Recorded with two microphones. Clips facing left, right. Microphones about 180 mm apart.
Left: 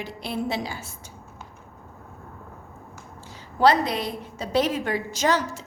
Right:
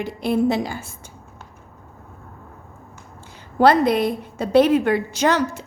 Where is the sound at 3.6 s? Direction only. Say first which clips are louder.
Right 5 dB; 55° right (ahead or behind).